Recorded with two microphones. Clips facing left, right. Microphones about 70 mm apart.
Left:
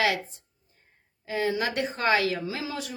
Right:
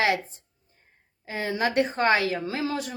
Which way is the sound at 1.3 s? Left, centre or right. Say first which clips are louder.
Even; right.